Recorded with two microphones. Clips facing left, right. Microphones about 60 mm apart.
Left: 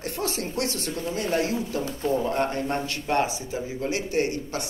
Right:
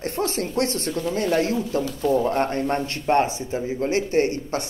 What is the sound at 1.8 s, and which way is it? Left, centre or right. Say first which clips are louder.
Speech: right 5 dB; left.